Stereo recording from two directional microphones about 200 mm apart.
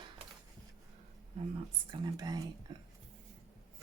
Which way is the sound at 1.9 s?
20° right (ahead or behind).